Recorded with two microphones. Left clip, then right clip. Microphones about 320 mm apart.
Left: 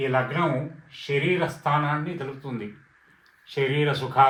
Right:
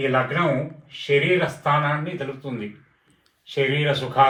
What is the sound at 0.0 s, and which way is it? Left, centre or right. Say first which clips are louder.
Speech: right 3 dB; left.